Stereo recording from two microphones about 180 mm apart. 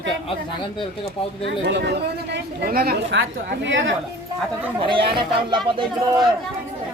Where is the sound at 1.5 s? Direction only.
70° right (ahead or behind); by 3.9 s 90° right.